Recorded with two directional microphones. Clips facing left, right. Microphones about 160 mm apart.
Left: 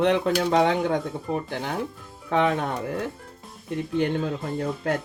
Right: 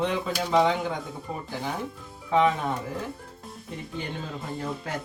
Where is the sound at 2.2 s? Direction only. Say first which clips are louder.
Even; 70° left (ahead or behind).